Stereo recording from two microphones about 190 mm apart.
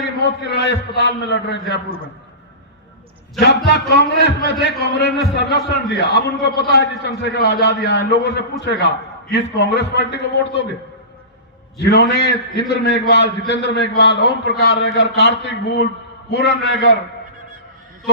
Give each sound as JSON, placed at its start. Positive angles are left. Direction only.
{"t": 0.2, "sound": "a man's voice", "side_deg": 65}
{"t": 3.7, "sound": "a man's voice", "side_deg": 60}
{"t": 11.8, "sound": "a man's voice", "side_deg": 60}